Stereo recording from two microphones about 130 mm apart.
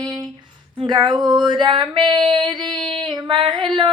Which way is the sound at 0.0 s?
30° right (ahead or behind).